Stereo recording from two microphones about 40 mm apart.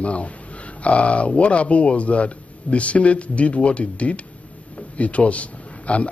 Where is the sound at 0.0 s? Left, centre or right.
Left.